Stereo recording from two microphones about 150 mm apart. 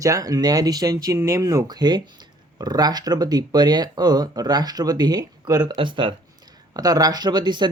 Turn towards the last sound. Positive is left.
turn(degrees=-30)  # may be behind; listen again after turning